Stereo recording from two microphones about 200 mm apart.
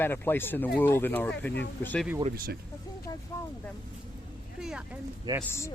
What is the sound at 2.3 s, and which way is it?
Speech, 45° right (ahead or behind).